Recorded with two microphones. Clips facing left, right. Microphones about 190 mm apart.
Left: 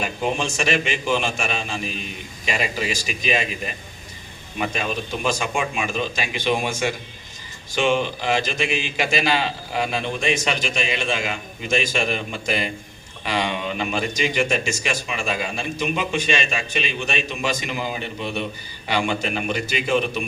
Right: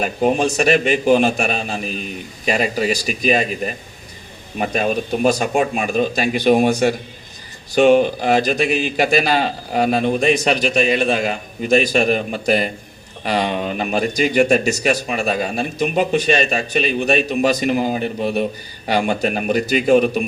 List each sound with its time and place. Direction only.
0.0 s speech: 40° right (ahead or behind)